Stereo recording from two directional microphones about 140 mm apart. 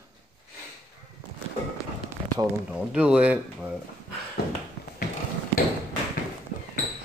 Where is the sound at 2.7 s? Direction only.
5° right (ahead or behind).